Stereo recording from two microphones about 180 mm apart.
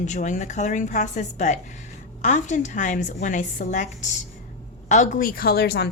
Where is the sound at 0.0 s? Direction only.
40° left (ahead or behind).